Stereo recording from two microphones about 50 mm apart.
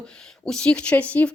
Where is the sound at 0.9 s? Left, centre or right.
Left.